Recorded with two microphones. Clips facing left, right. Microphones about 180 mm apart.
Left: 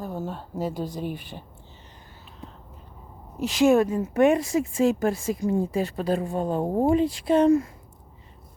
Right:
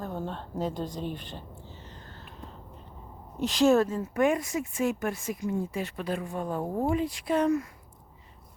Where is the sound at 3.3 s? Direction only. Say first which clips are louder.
Left 3 dB; 10° left (ahead or behind); by 7.7 s 25° left (ahead or behind).